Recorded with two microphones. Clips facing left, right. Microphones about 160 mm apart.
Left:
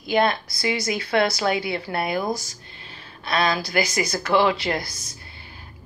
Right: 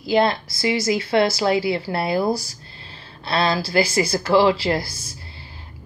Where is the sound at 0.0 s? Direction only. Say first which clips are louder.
Right 2 dB; 30° right (ahead or behind).